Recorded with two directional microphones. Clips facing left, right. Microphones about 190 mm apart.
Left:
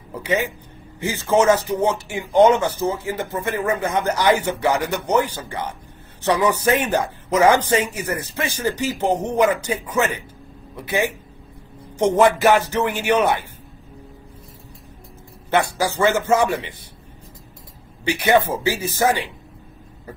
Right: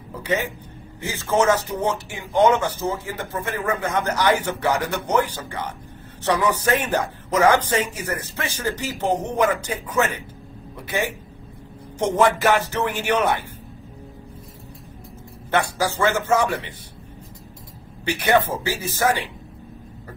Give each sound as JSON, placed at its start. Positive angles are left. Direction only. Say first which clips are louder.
{"t": 1.0, "sound": "speech", "louder": "left 3 dB", "side_deg": 15}
{"t": 12.2, "sound": "speech", "louder": "left 3 dB", "side_deg": 15}
{"t": 15.5, "sound": "speech", "louder": "left 2 dB", "side_deg": 10}
{"t": 18.0, "sound": "speech", "louder": "left 2 dB", "side_deg": 10}